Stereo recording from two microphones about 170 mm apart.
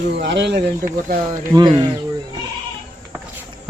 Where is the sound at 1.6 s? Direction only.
25° right (ahead or behind).